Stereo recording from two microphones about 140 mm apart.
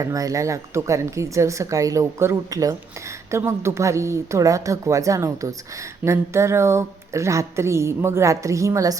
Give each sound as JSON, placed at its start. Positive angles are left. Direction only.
{"t": 0.0, "sound": "speech", "side_deg": -25}